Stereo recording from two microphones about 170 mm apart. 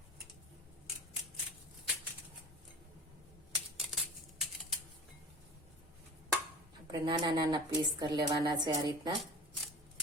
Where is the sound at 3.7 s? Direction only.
Centre (ahead or behind).